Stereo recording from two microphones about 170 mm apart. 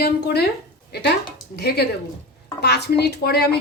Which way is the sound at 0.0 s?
75° left (ahead or behind).